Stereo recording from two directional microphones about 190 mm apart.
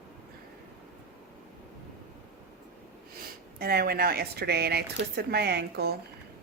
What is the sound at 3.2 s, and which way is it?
Speech, 55° right (ahead or behind).